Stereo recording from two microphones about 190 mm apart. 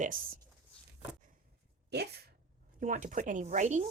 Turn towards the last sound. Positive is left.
turn(degrees=-40)  # may be behind; listen again after turning